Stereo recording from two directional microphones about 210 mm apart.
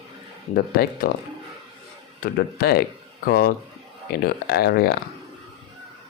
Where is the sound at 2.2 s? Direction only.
45° left (ahead or behind).